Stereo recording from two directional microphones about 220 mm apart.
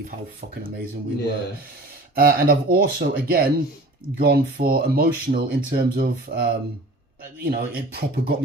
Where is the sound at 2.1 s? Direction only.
40° right (ahead or behind).